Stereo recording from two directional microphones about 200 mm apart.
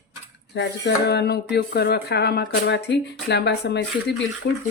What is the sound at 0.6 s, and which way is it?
Speech, 55° left (ahead or behind).